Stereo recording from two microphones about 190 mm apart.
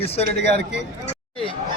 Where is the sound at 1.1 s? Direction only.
30° left (ahead or behind).